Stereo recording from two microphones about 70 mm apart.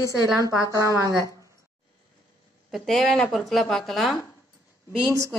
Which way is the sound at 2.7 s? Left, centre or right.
Centre.